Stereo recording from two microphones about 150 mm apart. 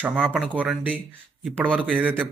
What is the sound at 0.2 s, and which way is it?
Speech, 5° left (ahead or behind).